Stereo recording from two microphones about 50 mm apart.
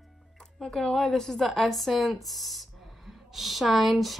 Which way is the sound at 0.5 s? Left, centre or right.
Centre.